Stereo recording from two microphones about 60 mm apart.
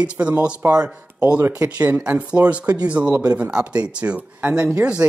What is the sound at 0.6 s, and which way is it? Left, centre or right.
Speech, right.